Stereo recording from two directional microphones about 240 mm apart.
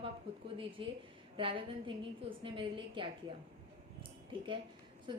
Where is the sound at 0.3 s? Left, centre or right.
Right.